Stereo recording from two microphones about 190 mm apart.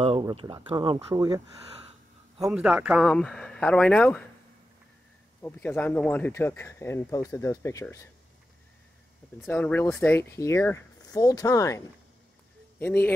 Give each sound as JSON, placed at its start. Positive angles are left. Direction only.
{"t": 0.0, "sound": "speech", "side_deg": -25}
{"t": 2.4, "sound": "speech", "side_deg": -5}
{"t": 5.4, "sound": "speech", "side_deg": 10}
{"t": 9.5, "sound": "speech", "side_deg": 10}